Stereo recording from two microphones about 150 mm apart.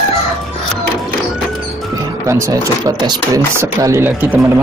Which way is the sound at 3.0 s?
25° right (ahead or behind).